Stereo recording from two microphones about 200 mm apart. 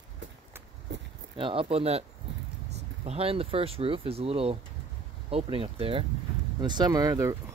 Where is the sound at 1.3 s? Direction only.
25° right (ahead or behind).